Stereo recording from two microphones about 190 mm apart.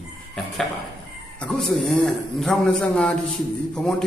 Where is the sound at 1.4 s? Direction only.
Centre (ahead or behind).